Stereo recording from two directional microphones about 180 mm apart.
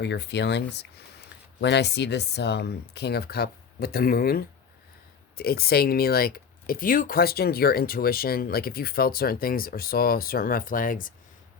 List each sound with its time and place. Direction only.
0.0 s speech: 70° left (ahead or behind); by 11.1 s 50° left (ahead or behind)